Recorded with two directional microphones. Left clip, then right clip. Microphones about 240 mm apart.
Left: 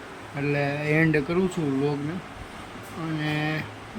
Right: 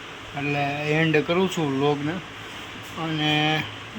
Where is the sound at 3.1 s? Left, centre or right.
Centre.